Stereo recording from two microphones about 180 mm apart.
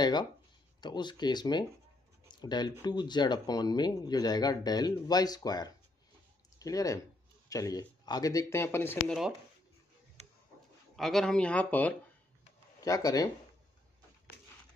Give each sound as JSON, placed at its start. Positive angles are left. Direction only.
{"t": 0.0, "sound": "speech", "side_deg": 25}
{"t": 2.2, "sound": "a sound", "side_deg": 25}
{"t": 2.8, "sound": "speech", "side_deg": 25}
{"t": 11.0, "sound": "speech", "side_deg": 0}
{"t": 12.8, "sound": "speech", "side_deg": 20}